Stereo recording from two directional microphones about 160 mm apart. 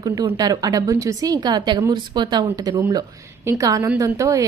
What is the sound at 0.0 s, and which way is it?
A woman's voice, 25° right (ahead or behind).